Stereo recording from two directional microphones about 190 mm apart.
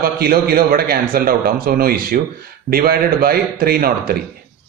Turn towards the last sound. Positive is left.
turn(degrees=-50)  # may be behind; listen again after turning